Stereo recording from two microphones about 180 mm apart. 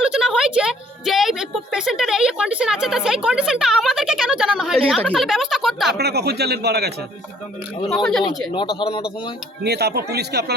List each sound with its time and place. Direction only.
0.0 s a woman's voice: 5° right (ahead or behind)
6.0 s speech: 65° right (ahead or behind)
7.9 s speech: centre (ahead or behind)
8.5 s speech: 30° left (ahead or behind)
9.6 s speech: 65° right (ahead or behind)